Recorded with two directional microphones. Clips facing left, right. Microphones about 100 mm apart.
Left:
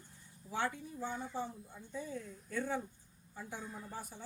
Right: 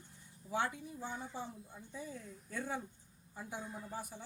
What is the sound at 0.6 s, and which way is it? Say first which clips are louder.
Speech: even; 15° right (ahead or behind).